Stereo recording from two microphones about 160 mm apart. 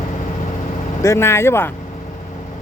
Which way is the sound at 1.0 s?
15° left (ahead or behind).